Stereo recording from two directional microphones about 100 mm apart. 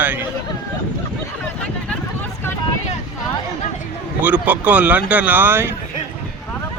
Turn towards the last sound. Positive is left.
turn(degrees=-20)  # may be behind; listen again after turning